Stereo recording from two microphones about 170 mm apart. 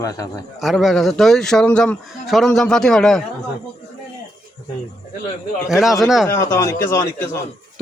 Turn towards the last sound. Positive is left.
turn(degrees=15)  # may be behind; listen again after turning